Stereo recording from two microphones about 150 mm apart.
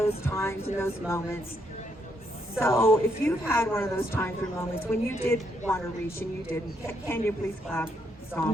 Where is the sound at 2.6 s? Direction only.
15° left (ahead or behind).